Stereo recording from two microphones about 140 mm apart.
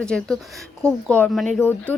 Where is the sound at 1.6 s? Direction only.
15° left (ahead or behind).